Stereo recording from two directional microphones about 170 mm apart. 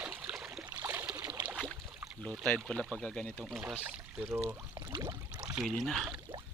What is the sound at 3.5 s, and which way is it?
Speech, 5° right (ahead or behind).